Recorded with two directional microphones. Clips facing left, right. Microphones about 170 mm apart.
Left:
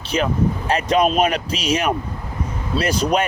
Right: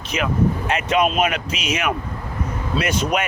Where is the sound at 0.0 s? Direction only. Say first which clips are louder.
Left 1 dB; 30° left (ahead or behind).